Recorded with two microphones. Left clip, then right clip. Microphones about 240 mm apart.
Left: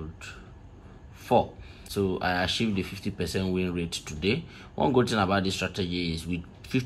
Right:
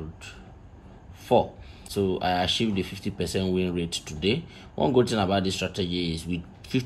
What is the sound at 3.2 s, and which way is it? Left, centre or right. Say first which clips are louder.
Speech: right 3 dB; centre.